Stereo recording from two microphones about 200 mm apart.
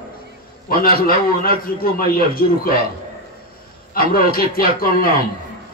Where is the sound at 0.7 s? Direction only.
45° left (ahead or behind).